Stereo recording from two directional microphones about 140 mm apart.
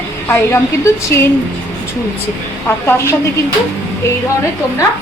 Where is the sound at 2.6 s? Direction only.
15° left (ahead or behind).